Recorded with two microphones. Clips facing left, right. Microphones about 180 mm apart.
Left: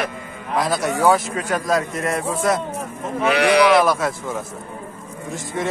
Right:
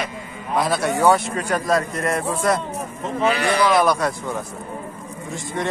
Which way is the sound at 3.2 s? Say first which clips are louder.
Left 4 dB; 75° left (ahead or behind).